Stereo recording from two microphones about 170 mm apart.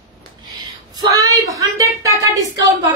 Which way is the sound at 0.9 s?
20° right (ahead or behind).